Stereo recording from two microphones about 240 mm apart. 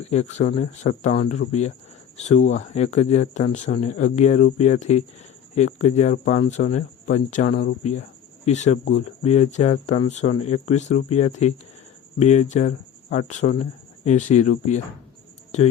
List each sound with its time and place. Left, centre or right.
0.0 s speech: left
7.5 s speech: left
8.4 s speech: left